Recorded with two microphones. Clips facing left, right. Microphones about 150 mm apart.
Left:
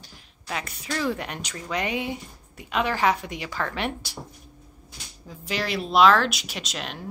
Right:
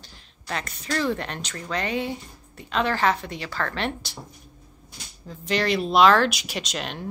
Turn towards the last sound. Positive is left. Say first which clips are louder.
# right 3 dB
turn(degrees=0)  # may be behind; listen again after turning